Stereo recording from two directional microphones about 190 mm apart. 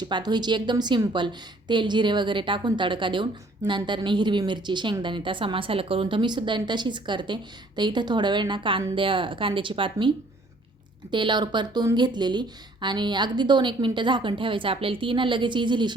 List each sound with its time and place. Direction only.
0.0 s a woman's voice: 20° right (ahead or behind)
11.1 s a woman's voice: 25° right (ahead or behind)